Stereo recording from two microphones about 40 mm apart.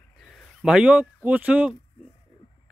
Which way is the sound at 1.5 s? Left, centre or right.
Right.